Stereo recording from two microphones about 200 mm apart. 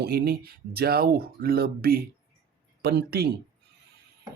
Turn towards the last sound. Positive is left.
turn(degrees=-50)  # may be behind; listen again after turning